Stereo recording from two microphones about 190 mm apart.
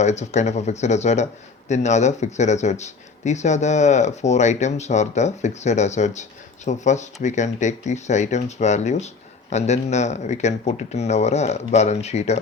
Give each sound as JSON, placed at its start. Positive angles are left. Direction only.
{"t": 0.0, "sound": "speech", "side_deg": 35}